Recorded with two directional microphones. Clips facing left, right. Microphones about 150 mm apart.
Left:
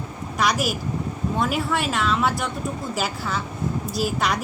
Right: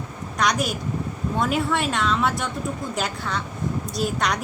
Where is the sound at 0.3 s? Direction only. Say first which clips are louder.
Even; 5° left (ahead or behind).